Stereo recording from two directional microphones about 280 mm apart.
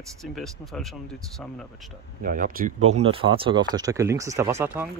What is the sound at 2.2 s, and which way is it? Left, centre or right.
Speech, right.